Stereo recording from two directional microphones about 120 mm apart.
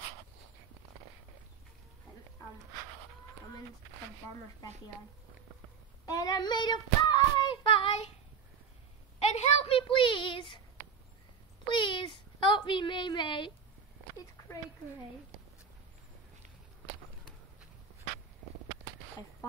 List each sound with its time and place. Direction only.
6.0 s child singing: 30° left (ahead or behind)
9.3 s a woman's voice: 55° left (ahead or behind)
11.6 s a sound: 40° left (ahead or behind)